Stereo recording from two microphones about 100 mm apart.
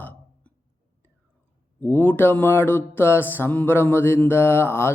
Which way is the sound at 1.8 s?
20° left (ahead or behind).